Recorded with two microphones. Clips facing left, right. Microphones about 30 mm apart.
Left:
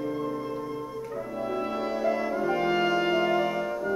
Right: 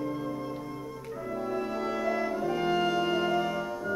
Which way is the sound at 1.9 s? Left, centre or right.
Centre.